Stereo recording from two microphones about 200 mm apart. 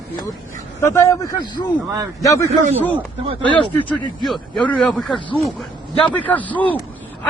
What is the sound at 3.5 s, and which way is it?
Speech, 25° left (ahead or behind).